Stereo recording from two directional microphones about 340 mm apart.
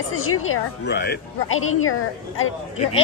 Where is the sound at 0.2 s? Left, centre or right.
Left.